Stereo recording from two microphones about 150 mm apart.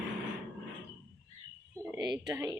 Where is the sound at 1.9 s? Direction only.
25° right (ahead or behind).